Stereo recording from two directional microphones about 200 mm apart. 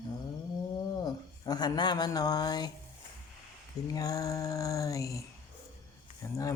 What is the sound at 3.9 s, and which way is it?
Mantra, 20° left (ahead or behind).